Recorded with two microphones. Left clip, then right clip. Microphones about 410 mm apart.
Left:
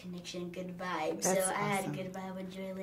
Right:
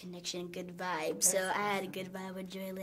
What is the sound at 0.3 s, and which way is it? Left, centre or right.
A woman's voice, right.